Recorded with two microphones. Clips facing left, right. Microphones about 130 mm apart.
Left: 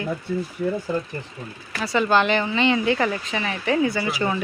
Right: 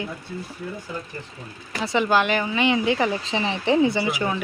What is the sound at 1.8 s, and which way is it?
Speech, 20° right (ahead or behind).